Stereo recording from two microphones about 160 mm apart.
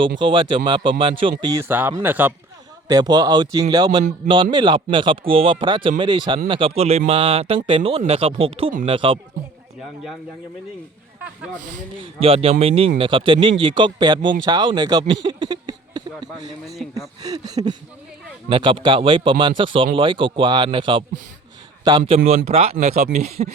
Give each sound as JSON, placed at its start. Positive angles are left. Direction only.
{"t": 0.2, "sound": "speech", "side_deg": -30}
{"t": 2.8, "sound": "speech", "side_deg": -25}
{"t": 11.9, "sound": "speech", "side_deg": -35}